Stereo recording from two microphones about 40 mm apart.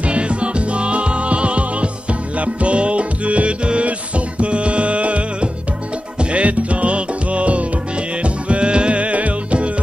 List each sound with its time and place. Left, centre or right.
0.0 s music: right